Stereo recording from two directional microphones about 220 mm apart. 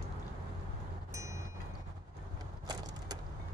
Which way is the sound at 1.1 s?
15° right (ahead or behind).